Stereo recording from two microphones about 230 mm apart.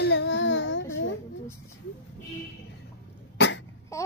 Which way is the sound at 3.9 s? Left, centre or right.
Centre.